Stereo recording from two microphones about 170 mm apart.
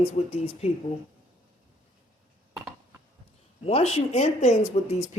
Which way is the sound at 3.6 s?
35° left (ahead or behind).